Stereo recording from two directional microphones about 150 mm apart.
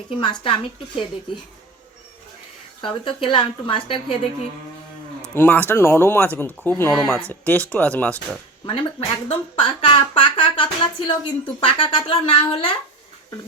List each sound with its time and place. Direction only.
0.2 s speech: 35° left (ahead or behind)
2.8 s speech: 35° left (ahead or behind)
5.3 s speech: 15° left (ahead or behind)
8.6 s speech: 35° left (ahead or behind)